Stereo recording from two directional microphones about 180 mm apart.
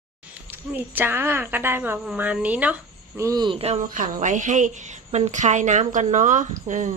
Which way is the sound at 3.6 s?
35° right (ahead or behind).